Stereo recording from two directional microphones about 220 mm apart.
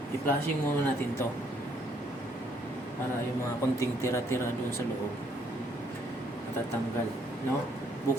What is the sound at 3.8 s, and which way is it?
Speech, 10° left (ahead or behind).